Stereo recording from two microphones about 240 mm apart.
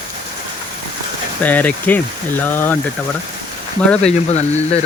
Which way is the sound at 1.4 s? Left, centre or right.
Centre.